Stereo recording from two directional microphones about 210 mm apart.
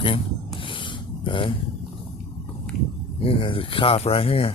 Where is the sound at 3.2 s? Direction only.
25° left (ahead or behind).